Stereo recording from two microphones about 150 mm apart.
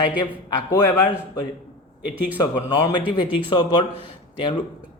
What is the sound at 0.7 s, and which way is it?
Speech, 15° left (ahead or behind).